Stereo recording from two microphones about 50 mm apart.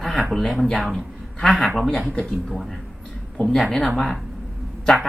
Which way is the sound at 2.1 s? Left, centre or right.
Centre.